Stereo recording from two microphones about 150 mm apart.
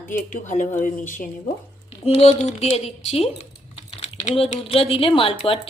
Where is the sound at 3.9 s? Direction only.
45° left (ahead or behind).